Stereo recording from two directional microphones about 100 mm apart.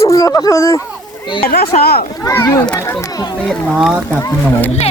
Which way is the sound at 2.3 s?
25° left (ahead or behind).